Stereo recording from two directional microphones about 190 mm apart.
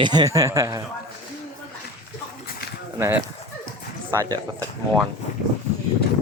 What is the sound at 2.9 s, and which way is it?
Speech, 15° right (ahead or behind).